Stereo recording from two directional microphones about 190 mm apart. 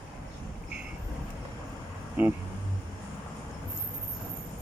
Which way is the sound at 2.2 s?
10° right (ahead or behind).